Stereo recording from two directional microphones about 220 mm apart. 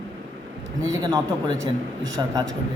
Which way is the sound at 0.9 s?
15° right (ahead or behind).